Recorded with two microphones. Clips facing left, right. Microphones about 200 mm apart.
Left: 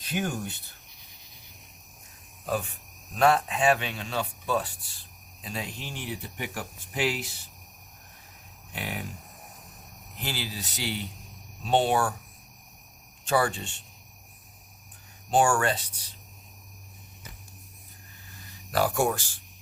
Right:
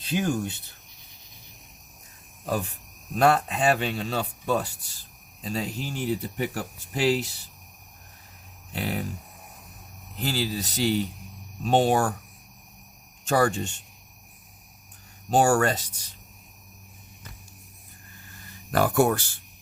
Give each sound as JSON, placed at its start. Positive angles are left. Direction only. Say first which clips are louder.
{"t": 0.0, "sound": "speech", "louder": "right 5 dB", "side_deg": -25}
{"t": 2.5, "sound": "speech", "louder": "right 1 dB", "side_deg": -40}
{"t": 8.7, "sound": "speech", "louder": "right 6 dB", "side_deg": -35}
{"t": 10.3, "sound": "speech", "louder": "right 8 dB", "side_deg": -40}
{"t": 13.2, "sound": "speech", "louder": "right 3 dB", "side_deg": -45}
{"t": 15.3, "sound": "speech", "louder": "right 3 dB", "side_deg": -40}
{"t": 18.7, "sound": "speech", "louder": "right 4 dB", "side_deg": -55}